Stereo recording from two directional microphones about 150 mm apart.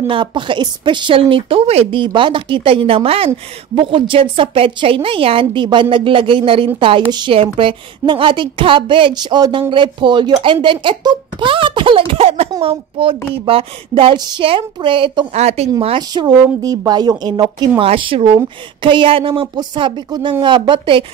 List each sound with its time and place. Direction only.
0.0 s a woman's voice: 35° right (ahead or behind)
15.8 s a woman's voice: 35° right (ahead or behind)